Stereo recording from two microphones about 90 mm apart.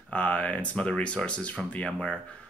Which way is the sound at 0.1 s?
15° left (ahead or behind).